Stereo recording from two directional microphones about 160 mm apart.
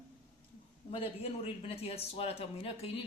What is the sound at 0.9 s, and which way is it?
A man's voice, 35° left (ahead or behind).